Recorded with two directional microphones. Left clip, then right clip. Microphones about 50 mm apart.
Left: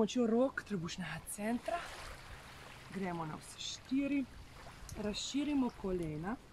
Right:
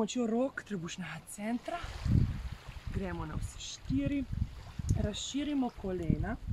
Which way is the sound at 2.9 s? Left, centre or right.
Right.